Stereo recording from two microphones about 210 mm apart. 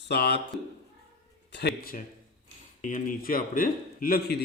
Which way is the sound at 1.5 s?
50° left (ahead or behind).